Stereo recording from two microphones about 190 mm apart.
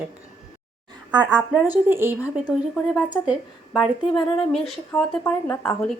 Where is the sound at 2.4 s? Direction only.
Centre (ahead or behind).